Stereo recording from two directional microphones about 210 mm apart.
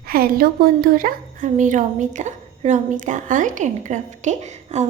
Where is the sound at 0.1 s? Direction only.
45° right (ahead or behind).